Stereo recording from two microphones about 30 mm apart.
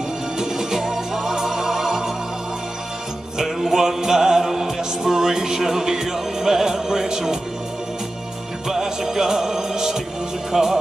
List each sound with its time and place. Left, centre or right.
0.4 s music: centre
3.3 s music: centre
8.6 s music: centre